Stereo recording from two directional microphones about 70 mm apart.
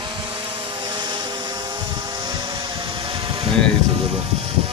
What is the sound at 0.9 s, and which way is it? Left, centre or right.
Vehicle, right.